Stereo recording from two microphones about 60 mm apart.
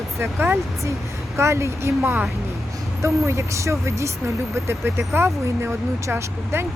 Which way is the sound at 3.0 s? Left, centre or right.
Right.